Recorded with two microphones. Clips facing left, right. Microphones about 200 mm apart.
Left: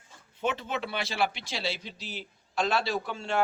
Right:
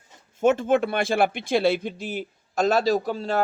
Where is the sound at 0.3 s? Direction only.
45° right (ahead or behind).